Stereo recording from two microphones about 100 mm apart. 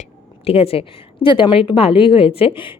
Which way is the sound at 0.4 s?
80° left.